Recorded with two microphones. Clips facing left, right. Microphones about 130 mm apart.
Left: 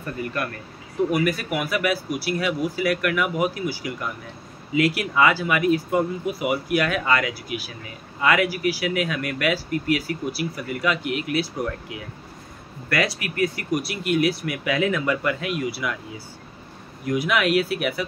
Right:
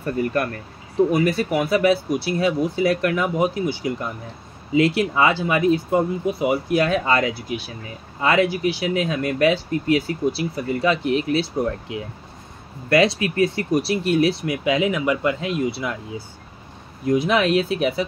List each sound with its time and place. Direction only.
0.0 s speech: 35° right (ahead or behind)
17.0 s speech: 25° right (ahead or behind)